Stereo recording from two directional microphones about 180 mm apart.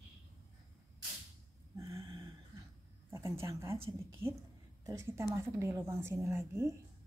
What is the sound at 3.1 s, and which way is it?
A woman's voice, 15° right (ahead or behind).